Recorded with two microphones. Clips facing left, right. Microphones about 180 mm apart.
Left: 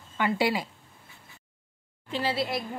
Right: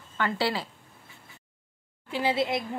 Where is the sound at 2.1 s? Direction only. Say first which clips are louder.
Right 2 dB; 15° right (ahead or behind).